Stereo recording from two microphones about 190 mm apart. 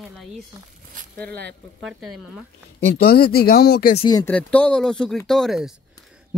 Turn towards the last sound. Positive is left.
turn(degrees=0)  # may be behind; listen again after turning